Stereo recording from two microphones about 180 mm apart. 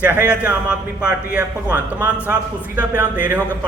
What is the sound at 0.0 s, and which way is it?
A man's voice, 10° right (ahead or behind).